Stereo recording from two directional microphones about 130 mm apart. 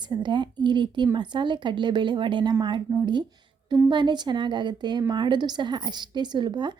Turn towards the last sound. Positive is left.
turn(degrees=-35)  # may be behind; listen again after turning